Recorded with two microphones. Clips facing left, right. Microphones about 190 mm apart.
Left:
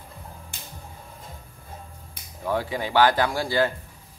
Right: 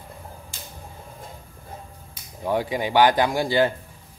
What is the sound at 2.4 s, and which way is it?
Speech, 15° right (ahead or behind).